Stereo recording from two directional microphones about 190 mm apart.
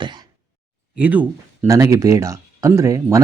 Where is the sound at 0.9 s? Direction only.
10° right (ahead or behind).